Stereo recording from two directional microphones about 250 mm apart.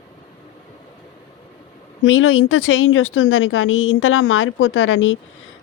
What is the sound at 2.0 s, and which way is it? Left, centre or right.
A woman's voice, left.